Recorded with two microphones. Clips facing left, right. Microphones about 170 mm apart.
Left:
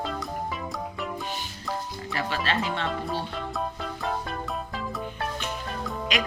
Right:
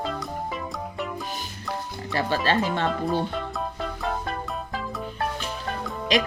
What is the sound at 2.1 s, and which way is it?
Speech, 35° right (ahead or behind).